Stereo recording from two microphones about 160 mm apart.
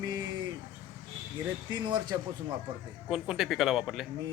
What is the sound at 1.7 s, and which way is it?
Speech, 25° right (ahead or behind).